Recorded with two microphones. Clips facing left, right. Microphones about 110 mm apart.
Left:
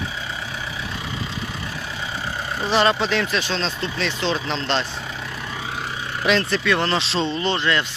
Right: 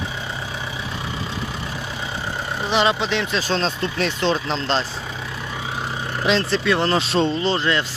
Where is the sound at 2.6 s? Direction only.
15° right (ahead or behind).